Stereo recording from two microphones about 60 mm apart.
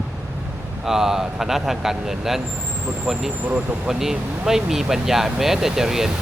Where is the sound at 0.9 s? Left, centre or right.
Centre.